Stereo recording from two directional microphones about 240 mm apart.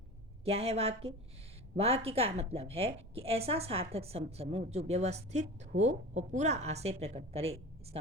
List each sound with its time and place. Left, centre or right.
0.4 s a woman's voice: right